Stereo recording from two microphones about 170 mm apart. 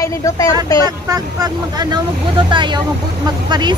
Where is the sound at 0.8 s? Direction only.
20° right (ahead or behind).